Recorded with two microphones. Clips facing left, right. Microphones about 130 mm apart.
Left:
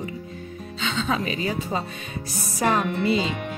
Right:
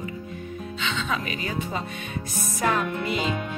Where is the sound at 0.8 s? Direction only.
35° left (ahead or behind).